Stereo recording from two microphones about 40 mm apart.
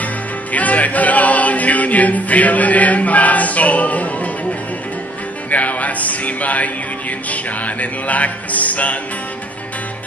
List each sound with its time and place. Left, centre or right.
0.0 s music: left
5.5 s music: left